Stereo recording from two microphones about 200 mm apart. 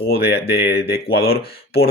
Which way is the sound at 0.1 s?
55° left (ahead or behind).